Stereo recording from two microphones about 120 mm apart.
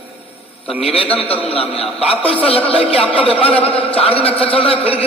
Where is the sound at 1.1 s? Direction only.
10° left (ahead or behind).